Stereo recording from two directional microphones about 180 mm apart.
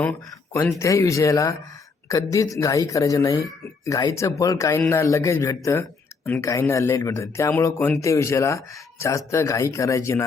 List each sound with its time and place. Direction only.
0.0 s speech: 10° left (ahead or behind)